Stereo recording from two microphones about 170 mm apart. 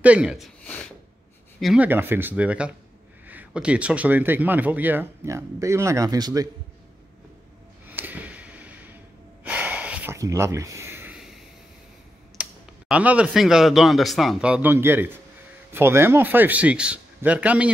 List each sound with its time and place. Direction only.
0.0 s speech: 5° right (ahead or behind)
0.7 s a sound: 10° left (ahead or behind)
1.6 s speech: centre (ahead or behind)
1.9 s speech: 10° right (ahead or behind)
7.9 s a sound: 10° right (ahead or behind)
9.4 s snort: 10° right (ahead or behind)
10.1 s speech: 15° right (ahead or behind)
12.4 s speech: 5° right (ahead or behind)